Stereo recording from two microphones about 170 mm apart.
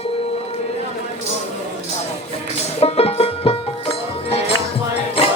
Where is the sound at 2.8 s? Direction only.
35° left (ahead or behind).